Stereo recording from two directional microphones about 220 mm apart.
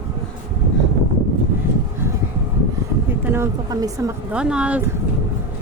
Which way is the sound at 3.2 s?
10° right (ahead or behind).